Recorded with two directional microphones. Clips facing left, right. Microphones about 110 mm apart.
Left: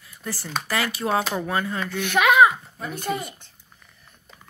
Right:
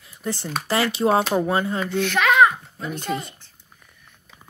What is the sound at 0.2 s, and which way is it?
Speech, 20° right (ahead or behind).